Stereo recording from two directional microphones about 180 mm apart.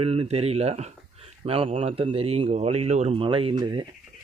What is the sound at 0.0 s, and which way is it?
Speech, 35° right (ahead or behind).